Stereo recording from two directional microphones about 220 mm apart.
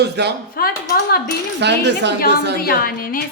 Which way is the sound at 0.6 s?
40° left (ahead or behind).